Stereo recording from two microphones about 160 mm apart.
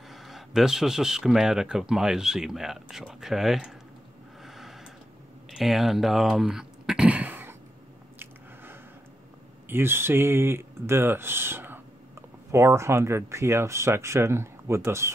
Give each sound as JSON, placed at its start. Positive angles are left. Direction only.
{"t": 0.1, "sound": "speech", "side_deg": 0}
{"t": 4.4, "sound": "a sound", "side_deg": 0}
{"t": 5.6, "sound": "speech", "side_deg": 0}
{"t": 9.7, "sound": "speech", "side_deg": -15}